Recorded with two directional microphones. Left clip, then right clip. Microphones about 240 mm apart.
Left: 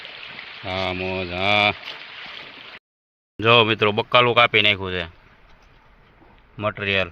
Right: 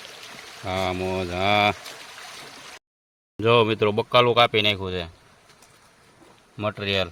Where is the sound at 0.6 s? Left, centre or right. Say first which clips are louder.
Even; centre.